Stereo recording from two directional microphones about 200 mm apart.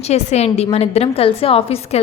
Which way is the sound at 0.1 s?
35° left (ahead or behind).